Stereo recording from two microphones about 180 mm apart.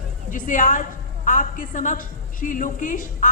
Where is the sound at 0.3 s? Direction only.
45° left (ahead or behind).